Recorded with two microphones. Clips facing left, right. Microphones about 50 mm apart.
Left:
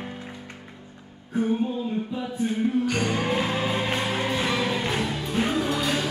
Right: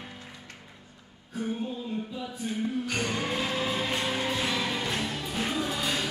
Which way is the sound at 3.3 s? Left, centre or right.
Left.